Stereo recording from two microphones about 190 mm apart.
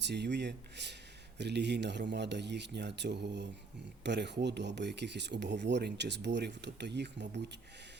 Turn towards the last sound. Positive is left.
turn(degrees=-65)  # may be behind; listen again after turning